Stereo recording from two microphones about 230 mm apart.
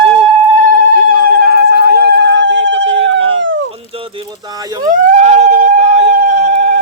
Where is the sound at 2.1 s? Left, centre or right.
Left.